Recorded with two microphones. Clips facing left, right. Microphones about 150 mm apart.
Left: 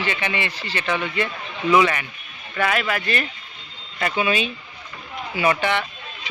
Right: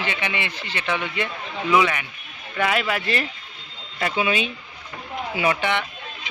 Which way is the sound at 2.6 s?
20° right (ahead or behind).